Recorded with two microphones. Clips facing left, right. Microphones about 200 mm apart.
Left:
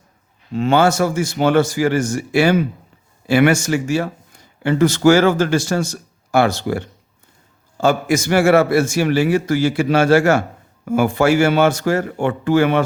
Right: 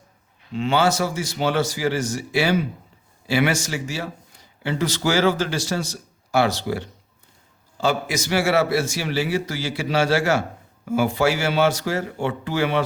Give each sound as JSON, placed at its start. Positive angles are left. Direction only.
{"t": 0.5, "sound": "a man's voice", "side_deg": 45}